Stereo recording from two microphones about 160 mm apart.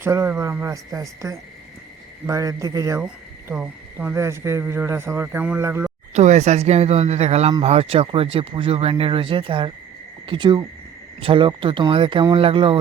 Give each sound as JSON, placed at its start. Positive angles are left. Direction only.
{"t": 0.0, "sound": "a man's voice", "side_deg": -15}
{"t": 6.1, "sound": "a man's voice", "side_deg": -45}